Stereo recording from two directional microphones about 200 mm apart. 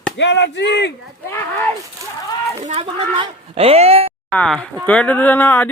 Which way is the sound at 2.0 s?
15° right (ahead or behind).